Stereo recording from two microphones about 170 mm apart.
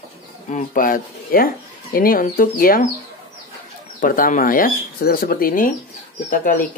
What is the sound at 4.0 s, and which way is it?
Speech, 55° left (ahead or behind).